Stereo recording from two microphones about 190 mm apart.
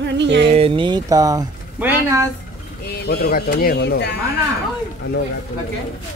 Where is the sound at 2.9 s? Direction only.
55° left (ahead or behind).